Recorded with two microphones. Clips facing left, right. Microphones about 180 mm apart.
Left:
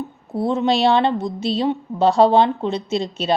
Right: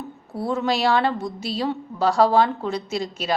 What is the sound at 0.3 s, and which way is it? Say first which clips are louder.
A woman's voice: left 5 dB; 25° left (ahead or behind).